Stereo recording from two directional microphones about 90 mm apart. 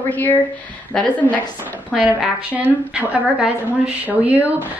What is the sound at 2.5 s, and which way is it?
A woman's voice, 20° right (ahead or behind).